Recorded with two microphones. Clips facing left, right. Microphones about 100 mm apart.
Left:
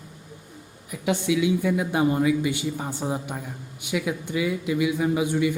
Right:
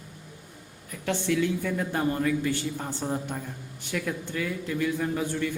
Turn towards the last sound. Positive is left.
turn(degrees=15)  # may be behind; listen again after turning